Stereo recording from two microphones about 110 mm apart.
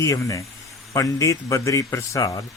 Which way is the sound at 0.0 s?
30° left (ahead or behind).